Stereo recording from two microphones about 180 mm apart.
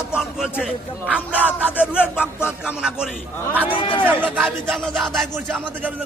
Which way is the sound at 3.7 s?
30° left (ahead or behind).